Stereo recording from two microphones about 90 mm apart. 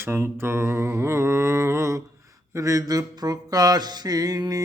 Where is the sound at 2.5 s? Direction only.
35° right (ahead or behind).